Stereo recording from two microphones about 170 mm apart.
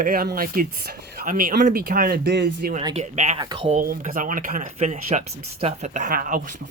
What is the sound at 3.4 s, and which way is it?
Speech, 25° right (ahead or behind).